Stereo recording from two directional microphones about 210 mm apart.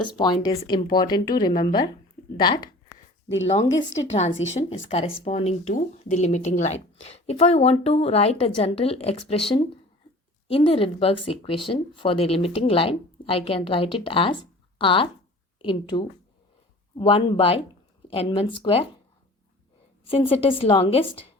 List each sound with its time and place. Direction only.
0.2 s speech: 20° left (ahead or behind)
3.4 s a woman's voice: 30° left (ahead or behind)
4.4 s speech: 65° left (ahead or behind)
4.9 s speech: 30° left (ahead or behind)
20.3 s speech: 25° left (ahead or behind)